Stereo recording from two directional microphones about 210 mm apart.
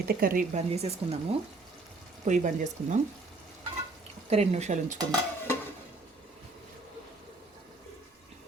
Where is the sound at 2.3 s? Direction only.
35° right (ahead or behind).